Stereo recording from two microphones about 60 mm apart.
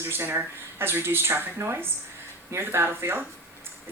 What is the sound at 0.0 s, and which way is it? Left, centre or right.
Speech, right.